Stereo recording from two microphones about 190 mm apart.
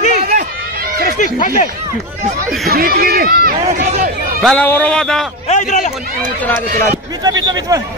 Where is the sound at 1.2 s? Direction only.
45° left (ahead or behind).